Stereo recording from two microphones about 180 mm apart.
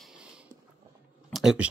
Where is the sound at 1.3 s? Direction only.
5° right (ahead or behind).